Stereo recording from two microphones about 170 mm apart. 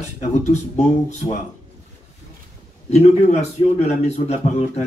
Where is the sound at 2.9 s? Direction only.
40° left (ahead or behind).